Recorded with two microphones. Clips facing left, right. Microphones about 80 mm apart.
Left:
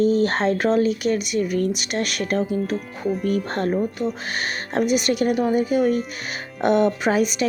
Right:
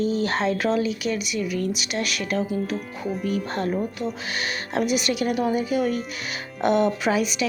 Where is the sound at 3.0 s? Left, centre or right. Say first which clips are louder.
Left 6 dB; centre.